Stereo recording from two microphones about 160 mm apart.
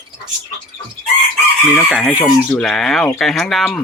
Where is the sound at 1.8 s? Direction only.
Centre (ahead or behind).